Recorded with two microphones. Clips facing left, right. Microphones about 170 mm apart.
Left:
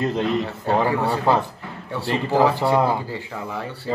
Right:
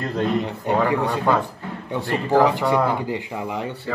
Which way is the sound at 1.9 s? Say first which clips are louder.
Even; 15° right (ahead or behind).